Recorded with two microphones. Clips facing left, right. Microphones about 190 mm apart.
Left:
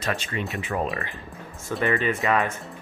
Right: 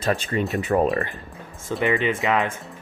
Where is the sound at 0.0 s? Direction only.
35° right (ahead or behind).